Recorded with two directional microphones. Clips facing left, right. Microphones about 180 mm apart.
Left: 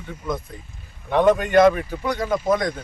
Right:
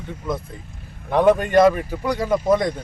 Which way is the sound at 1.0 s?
5° right (ahead or behind).